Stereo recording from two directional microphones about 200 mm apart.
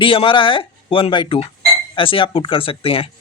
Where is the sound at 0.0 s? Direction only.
25° left (ahead or behind).